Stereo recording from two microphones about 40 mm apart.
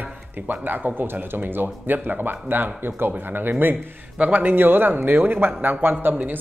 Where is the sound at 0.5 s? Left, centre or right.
Right.